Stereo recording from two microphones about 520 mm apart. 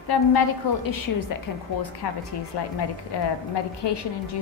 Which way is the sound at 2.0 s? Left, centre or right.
Left.